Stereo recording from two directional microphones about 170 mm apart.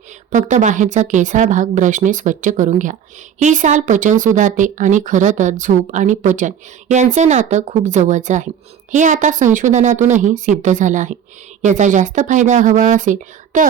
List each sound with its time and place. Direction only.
0.3 s a woman's voice: 50° right (ahead or behind)